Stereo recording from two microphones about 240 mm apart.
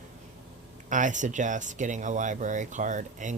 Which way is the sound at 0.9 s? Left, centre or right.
Right.